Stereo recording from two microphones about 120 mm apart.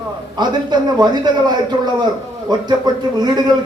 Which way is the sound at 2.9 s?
35° right (ahead or behind).